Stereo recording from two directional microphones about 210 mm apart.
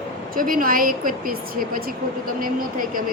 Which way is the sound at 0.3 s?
40° right (ahead or behind).